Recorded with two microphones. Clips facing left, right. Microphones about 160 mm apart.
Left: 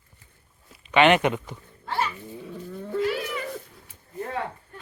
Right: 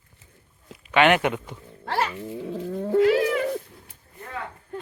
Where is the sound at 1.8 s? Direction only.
85° right.